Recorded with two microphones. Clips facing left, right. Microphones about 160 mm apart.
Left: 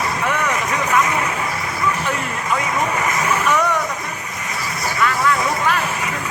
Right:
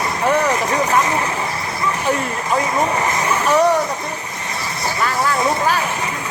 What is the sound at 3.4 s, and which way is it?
Vehicle, 35° right (ahead or behind).